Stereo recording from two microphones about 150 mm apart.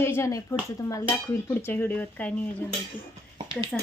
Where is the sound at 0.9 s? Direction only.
20° left (ahead or behind).